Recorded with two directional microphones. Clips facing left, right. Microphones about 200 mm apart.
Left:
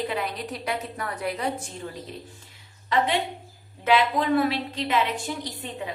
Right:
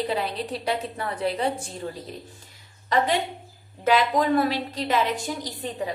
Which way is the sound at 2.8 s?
40° right (ahead or behind).